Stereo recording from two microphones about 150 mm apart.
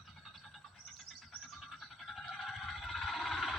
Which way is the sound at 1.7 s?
Centre (ahead or behind).